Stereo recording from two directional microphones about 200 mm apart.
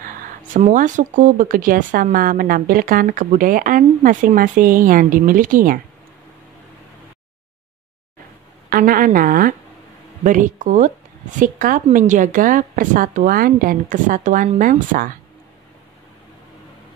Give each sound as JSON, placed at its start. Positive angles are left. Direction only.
{"t": 0.0, "sound": "speech", "side_deg": -40}
{"t": 8.6, "sound": "speech", "side_deg": -45}